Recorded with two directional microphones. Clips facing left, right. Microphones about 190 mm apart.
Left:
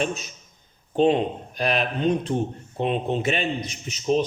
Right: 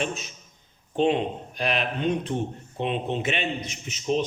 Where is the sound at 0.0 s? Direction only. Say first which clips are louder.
Left 3 dB; 40° left (ahead or behind).